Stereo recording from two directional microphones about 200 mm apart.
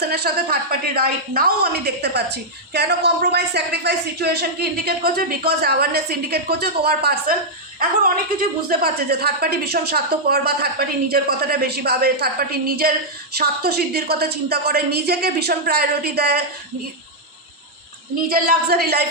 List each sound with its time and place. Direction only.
0.0 s a woman's voice: 50° right (ahead or behind)
18.3 s a woman's voice: 50° right (ahead or behind)